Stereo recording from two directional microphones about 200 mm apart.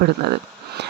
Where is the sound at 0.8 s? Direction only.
60° right (ahead or behind).